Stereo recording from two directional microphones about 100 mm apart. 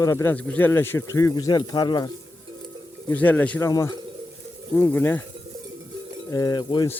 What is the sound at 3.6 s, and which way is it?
Speech, 35° left (ahead or behind).